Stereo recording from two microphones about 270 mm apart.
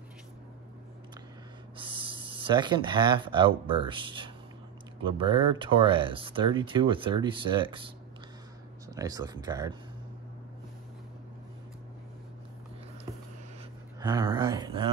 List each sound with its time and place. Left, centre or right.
1.8 s speech: centre
8.8 s speech: centre
13.9 s speech: centre